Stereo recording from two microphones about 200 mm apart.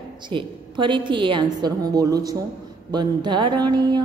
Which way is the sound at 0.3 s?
25° right (ahead or behind).